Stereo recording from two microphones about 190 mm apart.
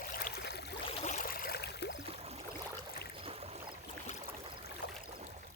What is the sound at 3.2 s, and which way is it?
Boat, 30° right (ahead or behind).